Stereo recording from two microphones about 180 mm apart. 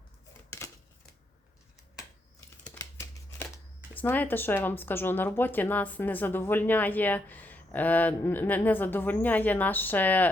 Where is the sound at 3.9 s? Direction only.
10° left (ahead or behind).